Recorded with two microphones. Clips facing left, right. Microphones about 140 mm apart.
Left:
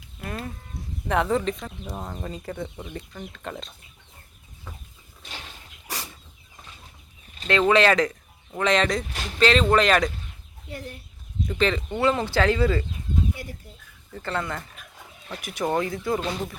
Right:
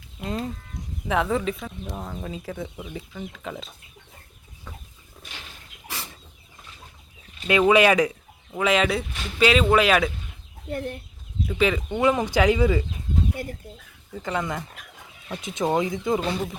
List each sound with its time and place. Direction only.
0.2 s speech: 20° right (ahead or behind)
1.0 s speech: centre (ahead or behind)
7.4 s speech: 10° right (ahead or behind)
10.7 s speech: 55° right (ahead or behind)
11.4 s speech: 5° right (ahead or behind)
14.1 s speech: 15° right (ahead or behind)